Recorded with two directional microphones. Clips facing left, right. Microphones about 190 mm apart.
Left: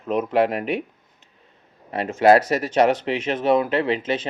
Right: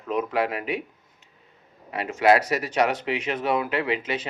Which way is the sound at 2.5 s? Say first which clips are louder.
Left 5 dB; 25° left (ahead or behind).